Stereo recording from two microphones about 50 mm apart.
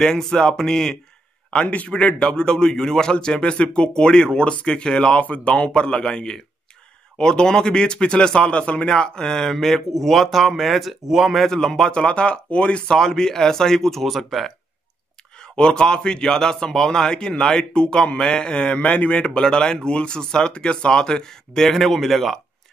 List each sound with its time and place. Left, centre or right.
0.0 s a man's voice: centre
1.5 s a man's voice: left
2.1 s a man's voice: centre
11.4 s a man's voice: centre
15.3 s a man's voice: centre